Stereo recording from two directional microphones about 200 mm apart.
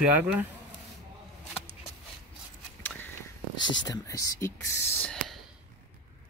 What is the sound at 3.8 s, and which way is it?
Speech, 15° left (ahead or behind).